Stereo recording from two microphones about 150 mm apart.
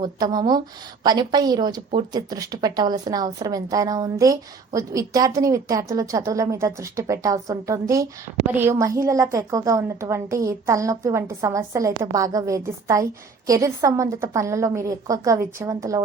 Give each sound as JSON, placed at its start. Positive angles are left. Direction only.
{"t": 0.0, "sound": "a woman's voice", "side_deg": -25}